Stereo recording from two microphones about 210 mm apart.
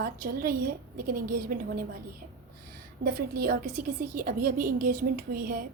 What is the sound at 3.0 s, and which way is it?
A woman's voice, 40° right (ahead or behind).